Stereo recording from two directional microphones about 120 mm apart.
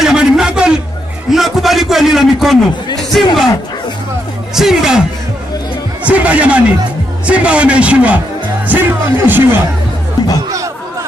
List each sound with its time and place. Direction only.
0.0 s a sound: 5° right (ahead or behind)
3.0 s speech: centre (ahead or behind)
4.6 s speech: 5° right (ahead or behind)
6.0 s speech: 10° right (ahead or behind)